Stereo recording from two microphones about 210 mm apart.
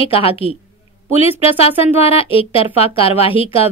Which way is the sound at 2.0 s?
25° left (ahead or behind).